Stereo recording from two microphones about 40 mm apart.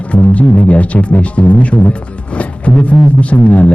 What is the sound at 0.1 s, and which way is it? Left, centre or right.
Speech, left.